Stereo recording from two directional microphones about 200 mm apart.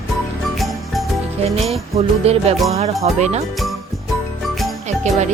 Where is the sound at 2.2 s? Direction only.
30° right (ahead or behind).